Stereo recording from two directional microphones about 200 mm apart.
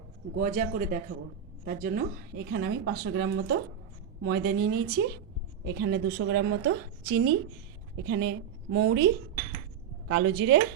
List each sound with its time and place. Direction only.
0.3 s a woman's voice: 40° right (ahead or behind); by 10.6 s 60° right (ahead or behind)